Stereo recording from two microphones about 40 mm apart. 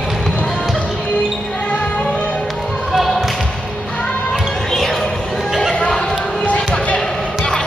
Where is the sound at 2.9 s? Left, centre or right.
Centre.